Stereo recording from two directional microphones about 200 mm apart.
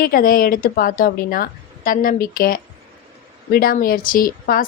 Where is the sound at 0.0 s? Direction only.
45° left (ahead or behind).